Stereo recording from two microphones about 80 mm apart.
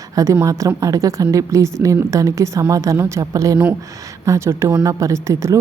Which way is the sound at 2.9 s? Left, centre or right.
Right.